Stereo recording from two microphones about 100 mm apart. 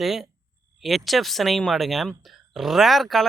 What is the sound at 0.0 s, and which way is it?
Speech, 5° right (ahead or behind).